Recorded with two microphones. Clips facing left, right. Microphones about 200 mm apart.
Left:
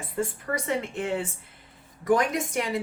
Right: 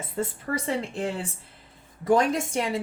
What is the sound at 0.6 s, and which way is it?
Speech, 35° right (ahead or behind).